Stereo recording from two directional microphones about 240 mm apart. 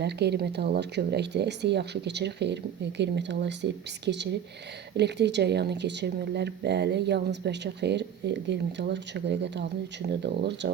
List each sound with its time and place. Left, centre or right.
0.0 s speech: right